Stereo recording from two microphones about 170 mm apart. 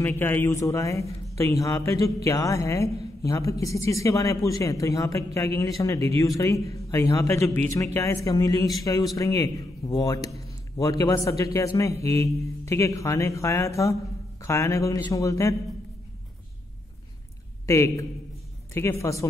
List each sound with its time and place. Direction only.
0.0 s a woman's voice: 10° left (ahead or behind)
17.6 s speech: 20° left (ahead or behind)